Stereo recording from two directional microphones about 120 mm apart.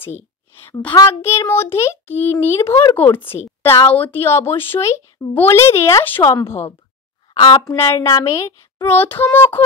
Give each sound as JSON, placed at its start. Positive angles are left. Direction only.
{"t": 0.0, "sound": "a woman's voice", "side_deg": 20}
{"t": 7.3, "sound": "a woman's voice", "side_deg": 40}
{"t": 7.9, "sound": "a woman's voice", "side_deg": 25}
{"t": 8.8, "sound": "child singing", "side_deg": 15}